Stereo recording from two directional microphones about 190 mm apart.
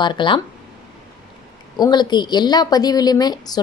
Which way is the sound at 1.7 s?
20° left (ahead or behind).